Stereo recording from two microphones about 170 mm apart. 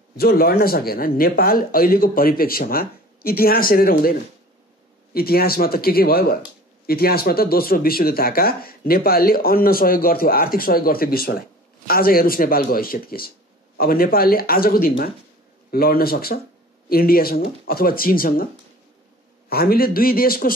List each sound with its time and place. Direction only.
0.2 s speech: 65° left (ahead or behind)
19.5 s speech: 60° left (ahead or behind)